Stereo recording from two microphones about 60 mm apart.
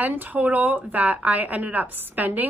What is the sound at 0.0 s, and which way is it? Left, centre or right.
A woman's voice, right.